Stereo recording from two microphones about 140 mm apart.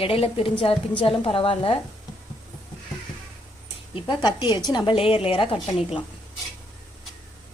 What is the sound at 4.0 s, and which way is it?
A woman's voice, 35° left (ahead or behind).